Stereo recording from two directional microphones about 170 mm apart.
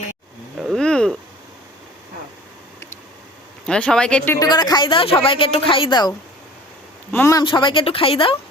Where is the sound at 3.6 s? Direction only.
5° left (ahead or behind).